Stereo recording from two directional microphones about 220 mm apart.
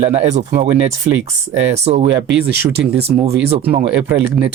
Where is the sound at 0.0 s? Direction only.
30° right (ahead or behind).